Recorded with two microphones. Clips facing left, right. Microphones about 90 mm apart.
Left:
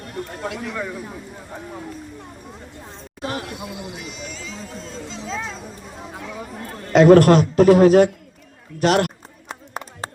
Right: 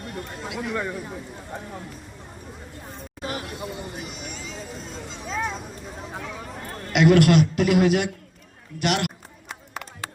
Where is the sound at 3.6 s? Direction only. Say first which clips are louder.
Left 1 dB; 90° left.